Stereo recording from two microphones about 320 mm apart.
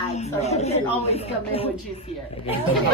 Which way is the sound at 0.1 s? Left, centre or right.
Centre.